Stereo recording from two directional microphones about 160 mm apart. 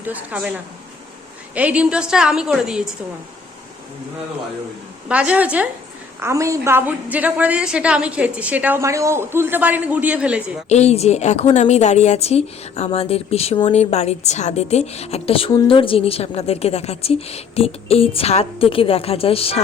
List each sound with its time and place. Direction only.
0.0 s a woman's voice: 10° right (ahead or behind)
1.5 s a woman's voice: 10° right (ahead or behind)
5.0 s a woman's voice: 5° right (ahead or behind)
10.7 s a woman's voice: 40° left (ahead or behind)